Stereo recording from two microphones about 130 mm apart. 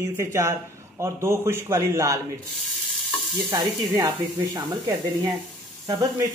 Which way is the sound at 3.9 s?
30° right (ahead or behind).